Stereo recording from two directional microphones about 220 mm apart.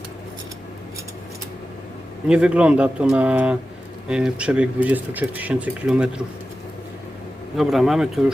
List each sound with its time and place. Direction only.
2.2 s speech: 5° right (ahead or behind)
7.5 s speech: centre (ahead or behind)